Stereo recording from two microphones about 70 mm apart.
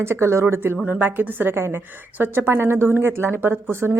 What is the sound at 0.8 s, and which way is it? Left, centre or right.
A woman's voice, right.